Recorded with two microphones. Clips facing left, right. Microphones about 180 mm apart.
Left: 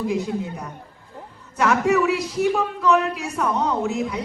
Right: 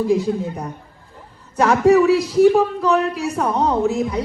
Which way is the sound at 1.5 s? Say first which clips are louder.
Right 6 dB; 35° right (ahead or behind).